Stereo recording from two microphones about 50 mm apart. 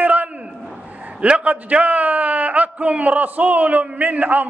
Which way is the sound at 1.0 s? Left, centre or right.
Right.